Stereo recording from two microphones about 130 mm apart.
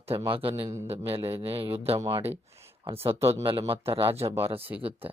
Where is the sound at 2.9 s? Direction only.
50° right (ahead or behind).